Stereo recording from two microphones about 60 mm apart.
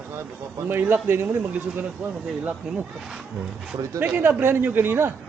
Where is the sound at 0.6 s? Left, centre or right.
Right.